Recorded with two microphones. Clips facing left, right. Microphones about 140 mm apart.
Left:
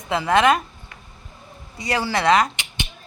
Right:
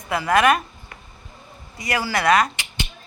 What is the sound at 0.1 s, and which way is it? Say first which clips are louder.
Speech: left 1 dB; 20° left (ahead or behind).